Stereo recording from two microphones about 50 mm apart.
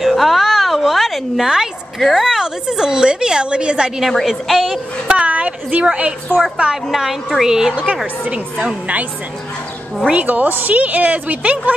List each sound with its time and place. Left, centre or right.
0.0 s a sound: centre
2.0 s speech: centre
2.2 s a woman's voice: centre
4.1 s a woman's voice: centre
5.0 s a woman's voice: right
6.9 s a woman's voice: centre
7.7 s a woman's voice: right
10.1 s a woman's voice: right